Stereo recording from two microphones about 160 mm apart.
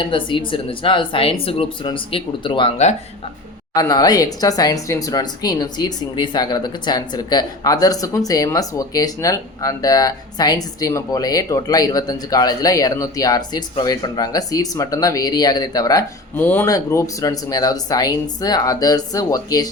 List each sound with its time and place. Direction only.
0.0 s speech: 30° left (ahead or behind)
3.8 s speech: 25° left (ahead or behind)